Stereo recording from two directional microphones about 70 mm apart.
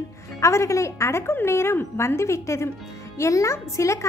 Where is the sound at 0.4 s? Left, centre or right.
Left.